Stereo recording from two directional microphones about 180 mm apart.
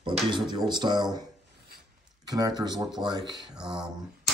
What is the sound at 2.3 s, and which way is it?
Speech, 20° right (ahead or behind).